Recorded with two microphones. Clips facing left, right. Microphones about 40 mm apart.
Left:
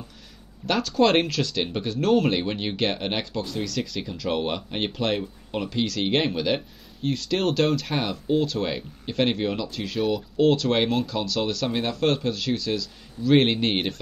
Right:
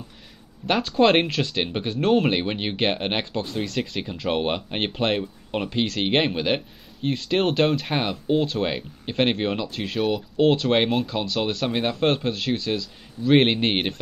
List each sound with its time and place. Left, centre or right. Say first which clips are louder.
0.7 s speech: right 2 dB; right